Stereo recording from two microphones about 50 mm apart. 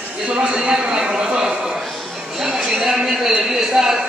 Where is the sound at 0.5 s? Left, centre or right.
Centre.